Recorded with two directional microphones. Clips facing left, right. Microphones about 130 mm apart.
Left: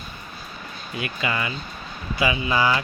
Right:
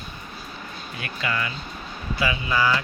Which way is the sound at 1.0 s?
15° left (ahead or behind).